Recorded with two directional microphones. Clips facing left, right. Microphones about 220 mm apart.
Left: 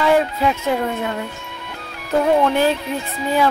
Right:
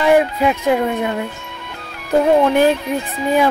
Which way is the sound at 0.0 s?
15° right (ahead or behind).